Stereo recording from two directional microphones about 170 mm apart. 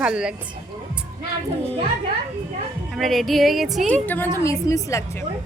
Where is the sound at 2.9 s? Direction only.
Centre (ahead or behind).